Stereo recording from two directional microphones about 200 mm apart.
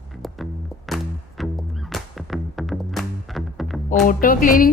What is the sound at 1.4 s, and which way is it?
Music, centre (ahead or behind).